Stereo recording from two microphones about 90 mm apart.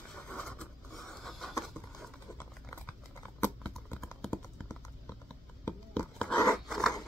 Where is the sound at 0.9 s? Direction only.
5° left (ahead or behind).